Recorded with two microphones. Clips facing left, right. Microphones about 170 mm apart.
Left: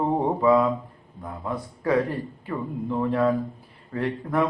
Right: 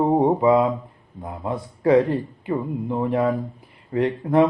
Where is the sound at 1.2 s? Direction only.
20° right (ahead or behind).